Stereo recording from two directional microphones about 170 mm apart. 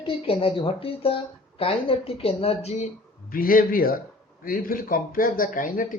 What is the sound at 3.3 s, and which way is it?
Speech, 55° left (ahead or behind).